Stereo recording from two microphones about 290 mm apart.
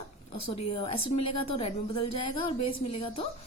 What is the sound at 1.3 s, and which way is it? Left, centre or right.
Speech, centre.